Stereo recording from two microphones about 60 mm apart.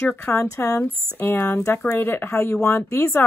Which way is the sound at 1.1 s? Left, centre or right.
Left.